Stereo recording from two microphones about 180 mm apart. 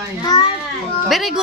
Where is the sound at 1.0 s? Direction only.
Centre (ahead or behind).